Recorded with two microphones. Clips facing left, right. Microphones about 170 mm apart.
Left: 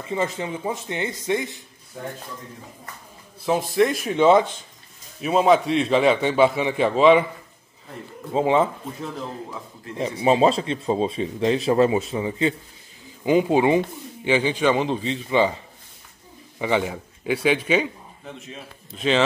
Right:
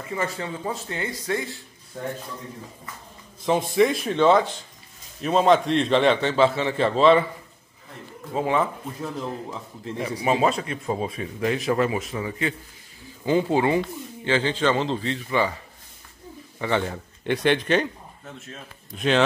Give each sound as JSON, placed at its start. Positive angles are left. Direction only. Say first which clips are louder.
{"t": 0.0, "sound": "a man's voice", "louder": "left 3 dB", "side_deg": 20}
{"t": 3.4, "sound": "speech", "louder": "even", "side_deg": 0}
{"t": 4.2, "sound": "a man's voice", "louder": "left 2 dB", "side_deg": 20}
{"t": 5.2, "sound": "speech", "louder": "left 1 dB", "side_deg": 5}
{"t": 8.3, "sound": "a man's voice", "louder": "left 4 dB", "side_deg": 25}
{"t": 10.2, "sound": "a man's voice", "louder": "left 4 dB", "side_deg": 25}
{"t": 16.5, "sound": "a man's voice", "louder": "left 2 dB", "side_deg": 15}